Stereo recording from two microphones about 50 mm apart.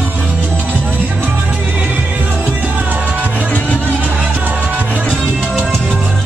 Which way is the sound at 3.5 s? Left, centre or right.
Left.